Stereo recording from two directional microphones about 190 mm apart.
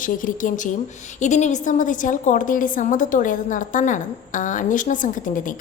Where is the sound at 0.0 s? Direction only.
45° left (ahead or behind).